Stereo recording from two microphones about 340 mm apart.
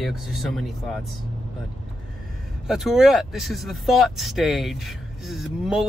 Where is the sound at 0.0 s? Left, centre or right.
Centre.